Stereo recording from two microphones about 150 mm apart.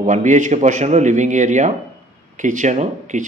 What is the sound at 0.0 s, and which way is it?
A man's voice, 55° right (ahead or behind).